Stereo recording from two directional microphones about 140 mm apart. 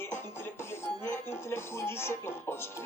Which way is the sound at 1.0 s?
15° left (ahead or behind).